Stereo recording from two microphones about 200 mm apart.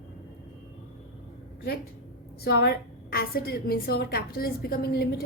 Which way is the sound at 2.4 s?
55° left (ahead or behind).